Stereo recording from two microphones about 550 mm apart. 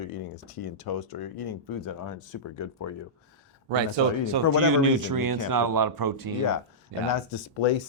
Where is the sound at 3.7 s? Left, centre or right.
Right.